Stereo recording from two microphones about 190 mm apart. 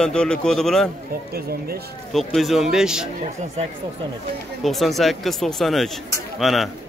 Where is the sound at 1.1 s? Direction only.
55° right (ahead or behind).